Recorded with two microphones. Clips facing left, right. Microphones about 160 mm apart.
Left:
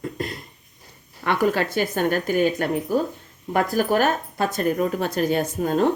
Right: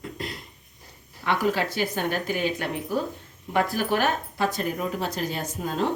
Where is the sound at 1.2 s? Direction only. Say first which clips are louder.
Left 3 dB; 55° left (ahead or behind).